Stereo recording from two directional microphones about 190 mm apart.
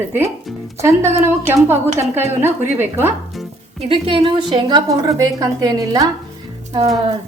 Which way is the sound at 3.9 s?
25° right (ahead or behind).